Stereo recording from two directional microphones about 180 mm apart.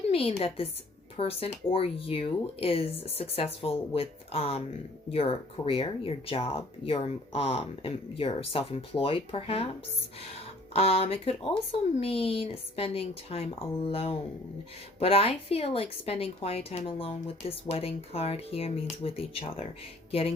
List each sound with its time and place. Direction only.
0.1 s a woman's voice: 30° left (ahead or behind)
10.8 s a woman's voice: 35° left (ahead or behind)